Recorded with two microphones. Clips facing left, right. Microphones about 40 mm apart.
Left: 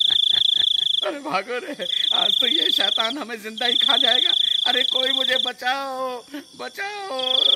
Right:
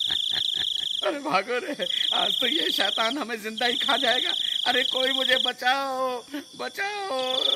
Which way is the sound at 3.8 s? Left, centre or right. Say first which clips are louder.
Left 5 dB; centre.